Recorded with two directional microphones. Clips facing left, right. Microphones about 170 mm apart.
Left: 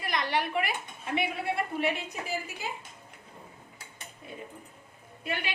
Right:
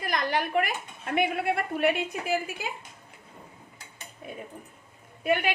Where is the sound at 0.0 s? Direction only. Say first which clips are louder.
Right 2 dB; 45° right (ahead or behind).